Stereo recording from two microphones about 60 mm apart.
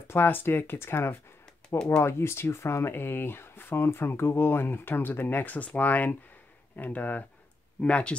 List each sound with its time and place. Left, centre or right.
0.1 s speech: left; by 8.2 s centre